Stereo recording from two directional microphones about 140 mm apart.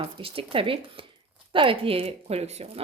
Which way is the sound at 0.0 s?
40° right (ahead or behind).